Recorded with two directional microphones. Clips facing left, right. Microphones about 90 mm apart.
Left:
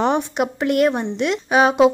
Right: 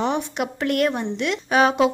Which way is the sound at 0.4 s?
20° left (ahead or behind).